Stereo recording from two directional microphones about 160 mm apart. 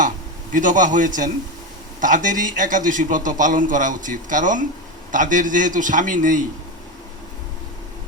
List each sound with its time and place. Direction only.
0.5 s a man's voice: 55° right (ahead or behind)